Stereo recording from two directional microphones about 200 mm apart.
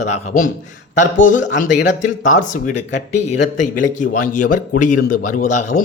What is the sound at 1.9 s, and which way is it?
Speech, 40° left (ahead or behind).